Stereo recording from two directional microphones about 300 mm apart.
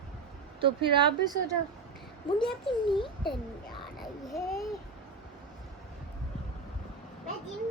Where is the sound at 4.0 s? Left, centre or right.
Centre.